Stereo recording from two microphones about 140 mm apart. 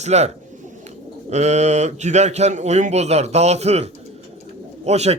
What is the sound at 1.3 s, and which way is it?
Speech, 50° right (ahead or behind).